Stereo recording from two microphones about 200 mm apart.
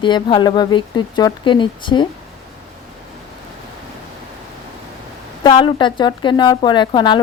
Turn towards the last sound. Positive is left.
turn(degrees=20)  # may be behind; listen again after turning